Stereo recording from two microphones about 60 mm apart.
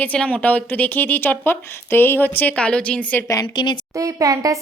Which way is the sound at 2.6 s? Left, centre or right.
Centre.